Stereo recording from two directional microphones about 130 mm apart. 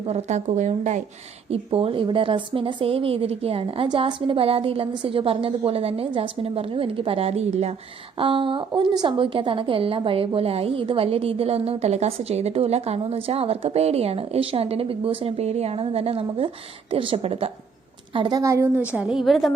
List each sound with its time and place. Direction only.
0.1 s speech: 60° right (ahead or behind)
1.5 s a woman's voice: 45° right (ahead or behind)
8.2 s a woman's voice: 40° right (ahead or behind)
18.3 s a woman's voice: 25° right (ahead or behind)
18.9 s a woman's voice: 10° right (ahead or behind)